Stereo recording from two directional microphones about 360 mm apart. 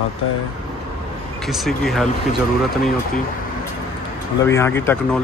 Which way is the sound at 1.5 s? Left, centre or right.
Centre.